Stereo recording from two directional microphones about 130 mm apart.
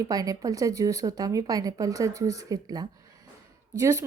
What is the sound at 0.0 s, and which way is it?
A woman's voice, 30° right (ahead or behind).